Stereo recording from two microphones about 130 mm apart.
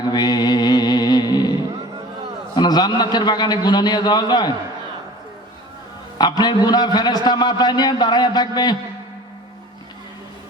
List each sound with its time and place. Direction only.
0.1 s mantra: 30° left (ahead or behind)
2.6 s a man's voice: 30° left (ahead or behind)
6.1 s a man's voice: 35° left (ahead or behind)